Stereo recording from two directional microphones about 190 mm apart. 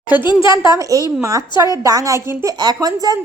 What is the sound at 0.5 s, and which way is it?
A woman's voice, 15° right (ahead or behind).